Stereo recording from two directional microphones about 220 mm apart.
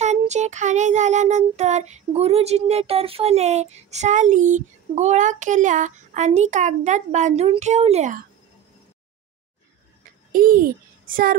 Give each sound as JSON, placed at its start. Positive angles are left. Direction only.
{"t": 0.0, "sound": "child singing", "side_deg": -30}
{"t": 10.3, "sound": "a child's voice", "side_deg": -40}